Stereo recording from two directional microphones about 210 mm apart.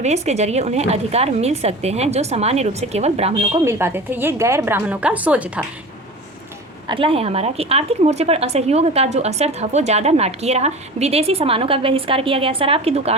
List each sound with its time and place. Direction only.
0.0 s a woman's voice: 30° right (ahead or behind)
3.6 s a woman's voice: 15° right (ahead or behind)
6.8 s speech: 25° right (ahead or behind)